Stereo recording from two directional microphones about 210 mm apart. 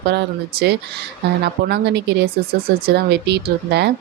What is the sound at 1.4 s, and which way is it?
Speech, 50° right (ahead or behind).